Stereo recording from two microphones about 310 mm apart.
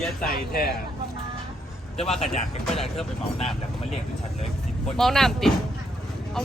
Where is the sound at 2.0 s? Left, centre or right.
Centre.